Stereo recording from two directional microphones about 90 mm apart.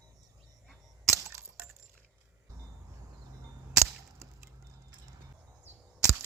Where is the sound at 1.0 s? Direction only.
30° right (ahead or behind).